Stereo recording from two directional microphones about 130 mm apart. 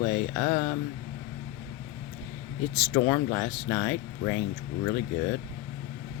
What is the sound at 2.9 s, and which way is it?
Speech, 20° left (ahead or behind).